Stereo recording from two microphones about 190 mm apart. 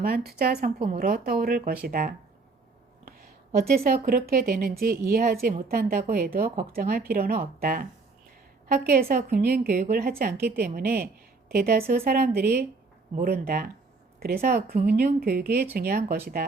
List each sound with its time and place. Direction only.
0.3 s a woman's voice: 55° right (ahead or behind)
3.9 s a woman's voice: 50° right (ahead or behind)